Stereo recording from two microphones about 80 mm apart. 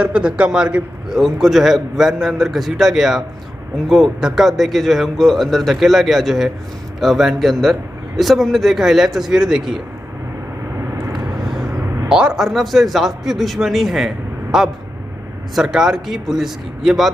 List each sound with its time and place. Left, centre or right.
0.0 s a man's voice: centre
10.8 s vehicle: right
12.1 s a man's voice: centre